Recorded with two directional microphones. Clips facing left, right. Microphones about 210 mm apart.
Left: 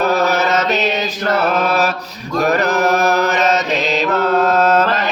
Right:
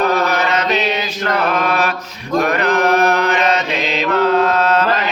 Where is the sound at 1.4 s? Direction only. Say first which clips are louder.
Left 1 dB; 40° left (ahead or behind).